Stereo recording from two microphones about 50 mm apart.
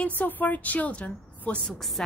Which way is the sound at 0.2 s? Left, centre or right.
Left.